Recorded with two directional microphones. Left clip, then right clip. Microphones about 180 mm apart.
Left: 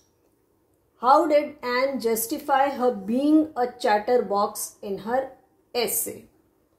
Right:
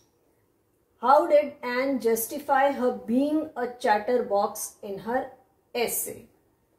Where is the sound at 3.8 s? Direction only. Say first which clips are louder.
Left 2 dB; 45° left (ahead or behind).